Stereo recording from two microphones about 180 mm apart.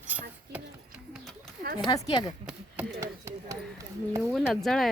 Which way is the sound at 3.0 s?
15° right (ahead or behind).